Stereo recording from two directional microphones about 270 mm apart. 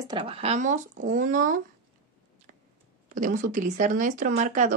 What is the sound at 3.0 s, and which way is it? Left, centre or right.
Speech, right.